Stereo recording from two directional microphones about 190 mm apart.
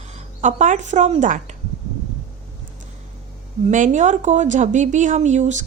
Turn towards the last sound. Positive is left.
turn(degrees=-40)  # may be behind; listen again after turning